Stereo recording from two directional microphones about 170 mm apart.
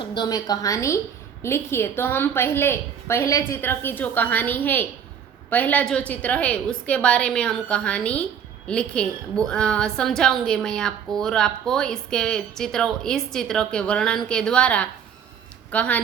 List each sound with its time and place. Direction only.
0.0 s a woman's voice: 25° left (ahead or behind); by 16.0 s 10° left (ahead or behind)